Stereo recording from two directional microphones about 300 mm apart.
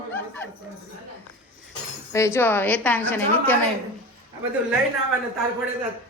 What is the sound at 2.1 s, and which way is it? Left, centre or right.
A woman's voice, centre.